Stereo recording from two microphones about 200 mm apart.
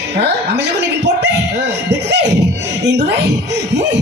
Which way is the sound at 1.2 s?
60° right (ahead or behind).